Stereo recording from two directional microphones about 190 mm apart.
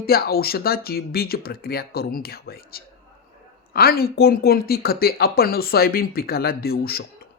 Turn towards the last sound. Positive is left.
turn(degrees=55)  # may be behind; listen again after turning